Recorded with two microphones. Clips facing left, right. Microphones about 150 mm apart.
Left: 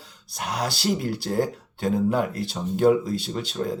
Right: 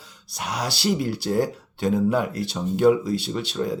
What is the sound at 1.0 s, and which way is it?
Speech, 45° left (ahead or behind).